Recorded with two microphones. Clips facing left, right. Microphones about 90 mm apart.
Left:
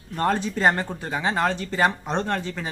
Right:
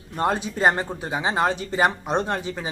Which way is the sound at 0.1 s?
15° right (ahead or behind).